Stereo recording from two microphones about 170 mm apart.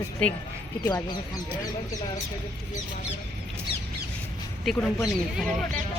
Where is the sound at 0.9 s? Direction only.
25° left (ahead or behind).